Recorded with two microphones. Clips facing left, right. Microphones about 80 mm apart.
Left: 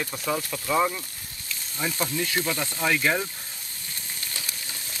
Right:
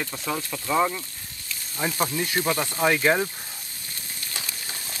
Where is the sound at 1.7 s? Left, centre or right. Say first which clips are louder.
Right 2 dB; right.